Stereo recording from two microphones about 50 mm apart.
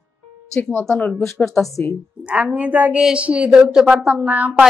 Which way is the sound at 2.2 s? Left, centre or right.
Right.